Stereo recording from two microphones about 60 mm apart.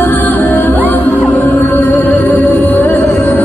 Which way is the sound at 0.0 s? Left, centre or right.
Left.